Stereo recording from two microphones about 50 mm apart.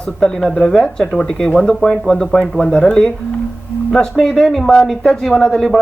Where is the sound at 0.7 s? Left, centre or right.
Centre.